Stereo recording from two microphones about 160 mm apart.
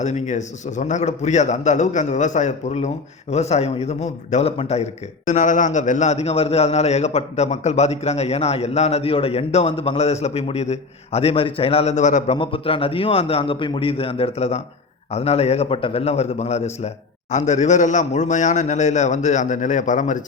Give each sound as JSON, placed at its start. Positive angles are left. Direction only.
{"t": 0.0, "sound": "a man's voice", "side_deg": 45}
{"t": 12.4, "sound": "a man's voice", "side_deg": 35}